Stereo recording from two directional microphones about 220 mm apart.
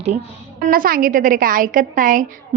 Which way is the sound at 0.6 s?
40° right (ahead or behind).